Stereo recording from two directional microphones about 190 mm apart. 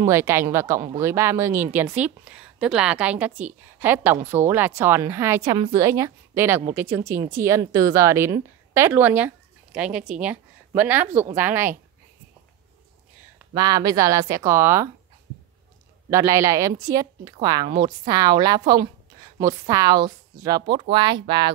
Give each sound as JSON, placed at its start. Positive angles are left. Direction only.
{"t": 0.0, "sound": "a woman's voice", "side_deg": -15}
{"t": 13.6, "sound": "a woman's voice", "side_deg": -20}
{"t": 16.1, "sound": "a woman's voice", "side_deg": -15}